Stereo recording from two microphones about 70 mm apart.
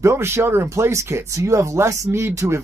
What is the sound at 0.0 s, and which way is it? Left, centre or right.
Speech, right.